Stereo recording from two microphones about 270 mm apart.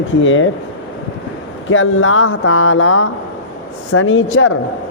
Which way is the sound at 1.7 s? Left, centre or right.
Left.